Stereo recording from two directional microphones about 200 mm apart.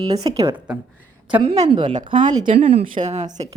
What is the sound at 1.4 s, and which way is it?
A woman's voice, 20° right (ahead or behind).